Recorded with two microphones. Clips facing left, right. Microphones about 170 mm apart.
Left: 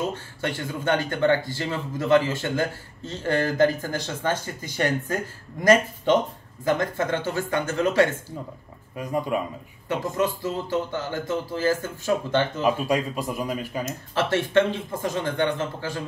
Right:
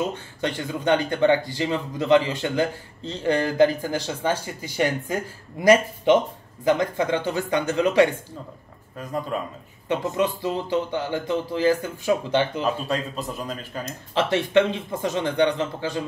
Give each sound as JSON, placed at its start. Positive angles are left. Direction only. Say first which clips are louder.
{"t": 0.1, "sound": "speech", "louder": "right 2 dB", "side_deg": -15}
{"t": 8.9, "sound": "speech", "louder": "left 2 dB", "side_deg": 10}
{"t": 10.1, "sound": "speech", "louder": "even", "side_deg": -15}
{"t": 12.6, "sound": "speech", "louder": "left 3 dB", "side_deg": 10}
{"t": 14.1, "sound": "speech", "louder": "right 1 dB", "side_deg": -15}